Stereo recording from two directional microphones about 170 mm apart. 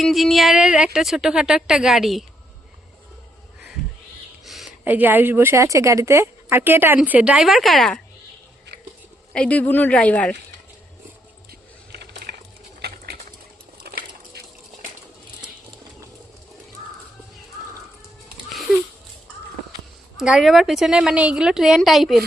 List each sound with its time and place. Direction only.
0.0 s a woman's voice: centre (ahead or behind)
4.4 s speech: centre (ahead or behind)
9.3 s speech: 5° left (ahead or behind)
11.9 s a sound: 75° right (ahead or behind)
12.8 s boiling: 70° right (ahead or behind)
13.8 s a sound: 70° right (ahead or behind)
20.2 s a woman's voice: centre (ahead or behind)